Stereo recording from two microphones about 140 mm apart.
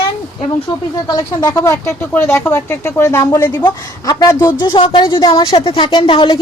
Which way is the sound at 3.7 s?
30° left (ahead or behind).